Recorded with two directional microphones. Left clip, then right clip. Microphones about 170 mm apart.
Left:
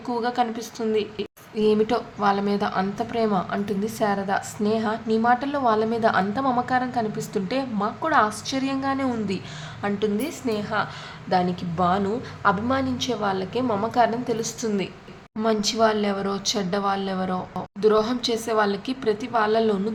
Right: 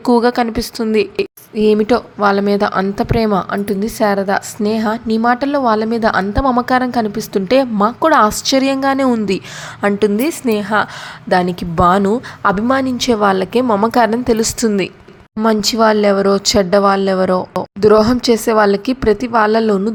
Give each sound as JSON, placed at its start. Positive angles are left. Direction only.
{"t": 0.0, "sound": "a woman's voice", "side_deg": -45}